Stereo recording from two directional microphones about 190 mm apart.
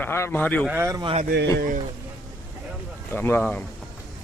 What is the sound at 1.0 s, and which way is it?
Speech, 30° right (ahead or behind).